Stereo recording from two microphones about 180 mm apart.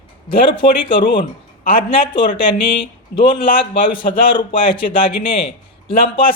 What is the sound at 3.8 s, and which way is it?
A man's voice, 30° left (ahead or behind).